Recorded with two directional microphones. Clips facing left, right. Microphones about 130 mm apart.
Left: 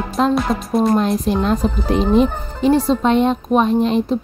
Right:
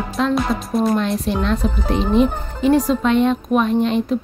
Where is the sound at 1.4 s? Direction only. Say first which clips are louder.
Left 2 dB; 40° left (ahead or behind).